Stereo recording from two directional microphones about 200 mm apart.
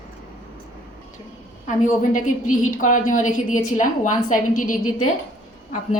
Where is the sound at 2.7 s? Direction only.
40° left (ahead or behind).